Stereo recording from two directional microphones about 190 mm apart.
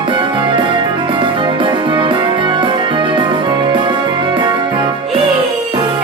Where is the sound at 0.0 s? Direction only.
25° right (ahead or behind).